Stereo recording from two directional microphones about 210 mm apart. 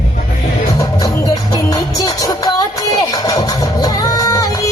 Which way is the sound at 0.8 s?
15° left (ahead or behind).